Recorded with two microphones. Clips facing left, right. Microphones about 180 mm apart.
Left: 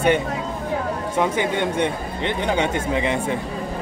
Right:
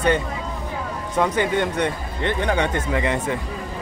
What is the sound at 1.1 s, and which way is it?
Speech, 10° left (ahead or behind).